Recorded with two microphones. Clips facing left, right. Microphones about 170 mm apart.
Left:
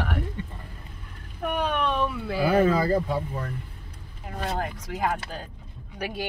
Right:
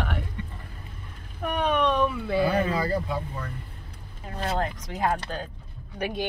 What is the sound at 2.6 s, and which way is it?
Speech, 40° left (ahead or behind).